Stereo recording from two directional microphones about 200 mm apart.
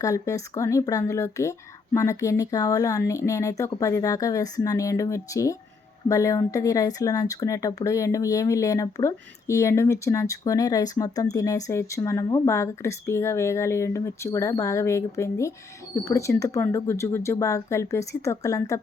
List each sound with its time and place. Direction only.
0.0 s speech: 15° left (ahead or behind)